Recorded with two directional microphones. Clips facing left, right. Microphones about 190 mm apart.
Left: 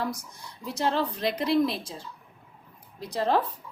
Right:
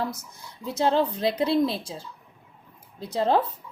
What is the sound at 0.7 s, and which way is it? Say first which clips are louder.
Speech: right 4 dB; 25° right (ahead or behind).